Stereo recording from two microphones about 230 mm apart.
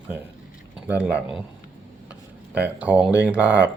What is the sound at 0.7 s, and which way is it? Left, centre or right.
Speech, centre.